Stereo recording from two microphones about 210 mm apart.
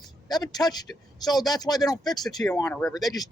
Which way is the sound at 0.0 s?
20° left (ahead or behind).